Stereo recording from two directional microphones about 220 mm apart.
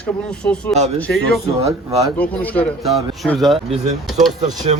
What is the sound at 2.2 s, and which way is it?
A man's voice, 5° left (ahead or behind).